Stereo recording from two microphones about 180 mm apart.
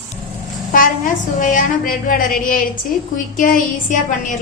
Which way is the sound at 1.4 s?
45° left (ahead or behind).